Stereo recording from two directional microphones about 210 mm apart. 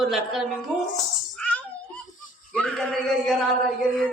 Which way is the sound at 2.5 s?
5° left (ahead or behind).